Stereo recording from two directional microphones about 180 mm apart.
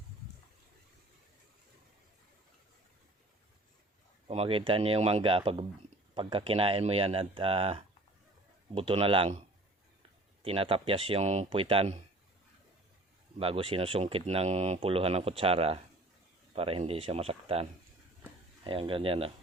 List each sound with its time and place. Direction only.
4.3 s speech: 30° right (ahead or behind)
10.4 s speech: 30° right (ahead or behind)
13.4 s speech: 30° right (ahead or behind)